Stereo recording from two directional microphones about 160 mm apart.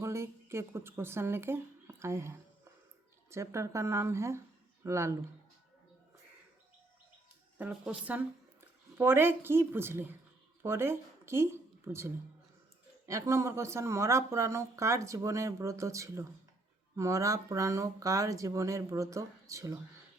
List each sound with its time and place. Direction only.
0.0 s speech: 15° right (ahead or behind)
7.6 s a woman's voice: 10° right (ahead or behind)